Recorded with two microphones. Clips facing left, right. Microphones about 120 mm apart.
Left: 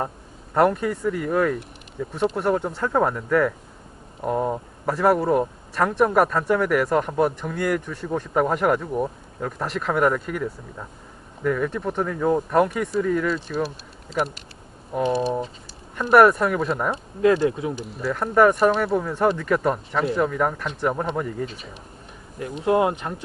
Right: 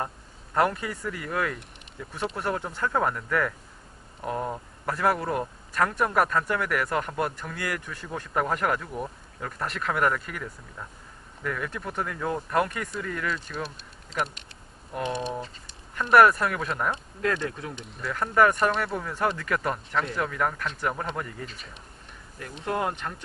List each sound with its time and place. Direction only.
0.5 s speech: centre (ahead or behind)
17.7 s speech: centre (ahead or behind)
22.5 s speech: 15° left (ahead or behind)